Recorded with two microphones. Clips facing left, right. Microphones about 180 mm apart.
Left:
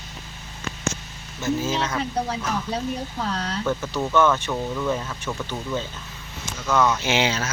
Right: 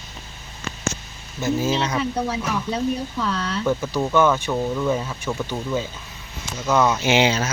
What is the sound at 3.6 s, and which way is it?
Speech, 10° right (ahead or behind).